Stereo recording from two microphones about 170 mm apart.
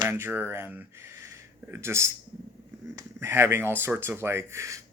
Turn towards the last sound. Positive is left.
turn(degrees=-15)  # may be behind; listen again after turning